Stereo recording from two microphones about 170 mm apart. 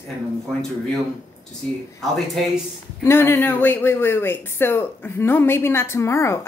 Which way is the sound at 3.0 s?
15° left (ahead or behind).